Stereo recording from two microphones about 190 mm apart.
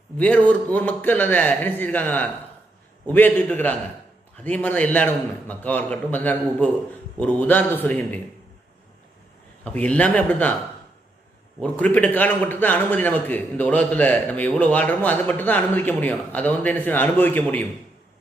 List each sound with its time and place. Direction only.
0.2 s a man's voice: 5° left (ahead or behind)
4.4 s a man's voice: 5° left (ahead or behind)
9.6 s a man's voice: 5° left (ahead or behind)
11.6 s a man's voice: 10° left (ahead or behind)